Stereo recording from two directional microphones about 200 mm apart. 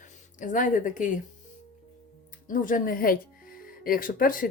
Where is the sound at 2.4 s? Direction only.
40° left (ahead or behind).